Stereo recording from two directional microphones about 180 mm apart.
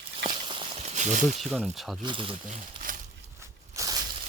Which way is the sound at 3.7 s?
20° right (ahead or behind).